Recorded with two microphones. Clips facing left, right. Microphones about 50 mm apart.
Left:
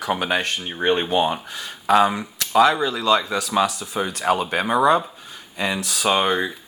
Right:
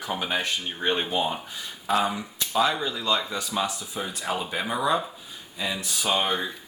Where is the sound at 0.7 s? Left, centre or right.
Left.